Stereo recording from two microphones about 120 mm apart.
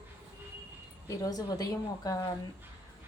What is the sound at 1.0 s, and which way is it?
A woman's voice, 30° left (ahead or behind).